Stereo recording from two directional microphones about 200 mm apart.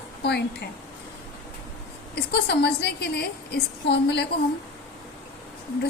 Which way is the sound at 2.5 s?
55° left (ahead or behind).